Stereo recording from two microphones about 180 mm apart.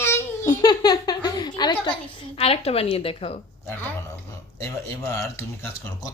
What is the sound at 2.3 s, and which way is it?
A woman's voice, 35° left (ahead or behind).